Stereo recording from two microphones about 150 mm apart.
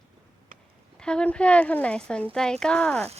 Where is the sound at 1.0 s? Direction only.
5° left (ahead or behind).